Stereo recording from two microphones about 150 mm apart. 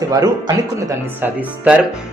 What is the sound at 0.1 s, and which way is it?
Speech, 25° right (ahead or behind).